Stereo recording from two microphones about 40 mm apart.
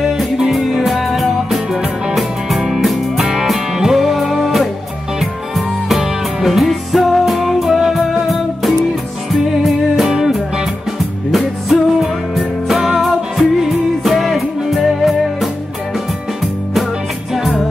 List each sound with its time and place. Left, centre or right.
0.0 s music: centre
5.9 s music: centre
10.0 s music: centre
11.3 s music: centre
13.0 s music: centre
17.3 s music: centre